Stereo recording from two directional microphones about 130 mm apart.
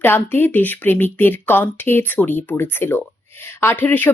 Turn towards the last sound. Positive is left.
turn(degrees=15)  # may be behind; listen again after turning